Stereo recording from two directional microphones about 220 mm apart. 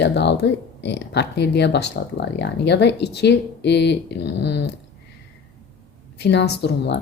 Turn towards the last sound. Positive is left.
turn(degrees=50)  # may be behind; listen again after turning